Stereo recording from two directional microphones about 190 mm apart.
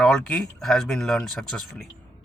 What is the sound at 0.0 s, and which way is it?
Speech, 5° left (ahead or behind).